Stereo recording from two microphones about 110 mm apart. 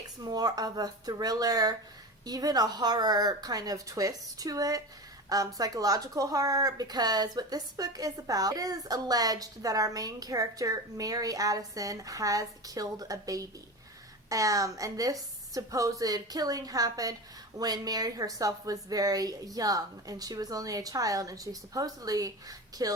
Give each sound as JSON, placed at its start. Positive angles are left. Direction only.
{"t": 0.2, "sound": "speech", "side_deg": -35}